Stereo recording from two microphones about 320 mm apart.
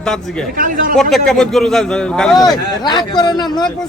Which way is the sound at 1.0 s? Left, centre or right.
Centre.